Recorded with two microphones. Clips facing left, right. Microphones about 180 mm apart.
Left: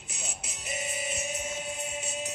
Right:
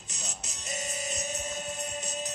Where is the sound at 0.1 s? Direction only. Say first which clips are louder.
Left 1 dB; 40° right (ahead or behind).